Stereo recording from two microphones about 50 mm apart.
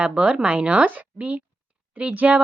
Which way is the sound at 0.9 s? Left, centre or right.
Right.